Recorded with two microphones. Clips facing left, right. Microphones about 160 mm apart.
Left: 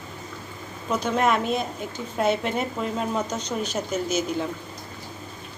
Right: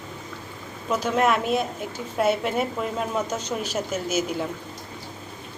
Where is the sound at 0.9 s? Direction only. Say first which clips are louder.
Right 1 dB; 5° right (ahead or behind).